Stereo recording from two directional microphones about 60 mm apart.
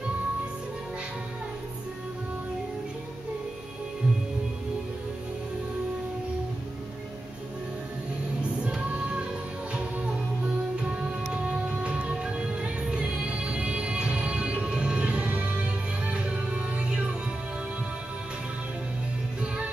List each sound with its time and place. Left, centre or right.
8.4 s music: centre
19.4 s music: centre